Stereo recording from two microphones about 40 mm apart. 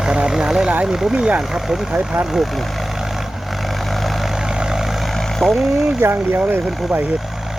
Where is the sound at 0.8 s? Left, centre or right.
Centre.